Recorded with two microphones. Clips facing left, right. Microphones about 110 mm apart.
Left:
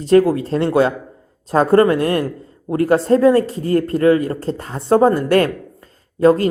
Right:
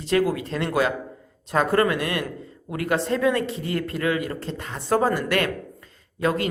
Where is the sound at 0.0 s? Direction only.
35° left (ahead or behind).